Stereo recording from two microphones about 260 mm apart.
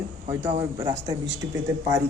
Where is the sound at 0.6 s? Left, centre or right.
Centre.